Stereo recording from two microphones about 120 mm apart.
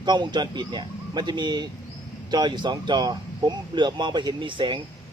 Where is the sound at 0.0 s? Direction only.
40° right (ahead or behind).